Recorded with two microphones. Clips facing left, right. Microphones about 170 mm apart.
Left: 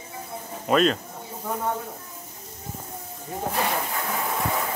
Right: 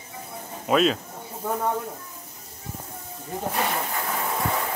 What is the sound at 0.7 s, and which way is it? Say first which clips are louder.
Speech: even; centre (ahead or behind).